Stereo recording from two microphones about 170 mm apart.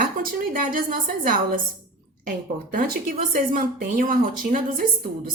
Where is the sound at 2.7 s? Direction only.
55° right (ahead or behind).